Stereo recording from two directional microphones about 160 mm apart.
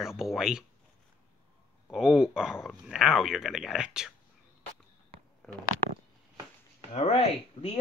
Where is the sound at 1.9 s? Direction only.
5° right (ahead or behind).